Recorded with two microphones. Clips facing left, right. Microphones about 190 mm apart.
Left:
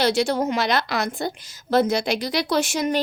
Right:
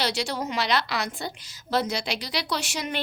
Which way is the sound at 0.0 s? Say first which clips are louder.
Left 8 dB; 50° left (ahead or behind).